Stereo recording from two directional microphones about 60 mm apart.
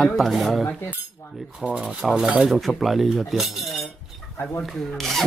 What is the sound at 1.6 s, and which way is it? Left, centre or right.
Speech, centre.